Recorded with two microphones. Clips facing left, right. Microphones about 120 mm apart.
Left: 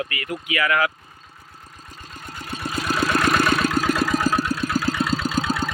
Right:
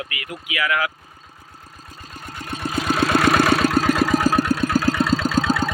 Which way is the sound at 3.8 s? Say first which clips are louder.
Right 3 dB; 30° right (ahead or behind).